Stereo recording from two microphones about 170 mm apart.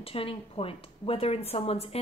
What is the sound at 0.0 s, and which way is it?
A woman's voice, 35° left (ahead or behind).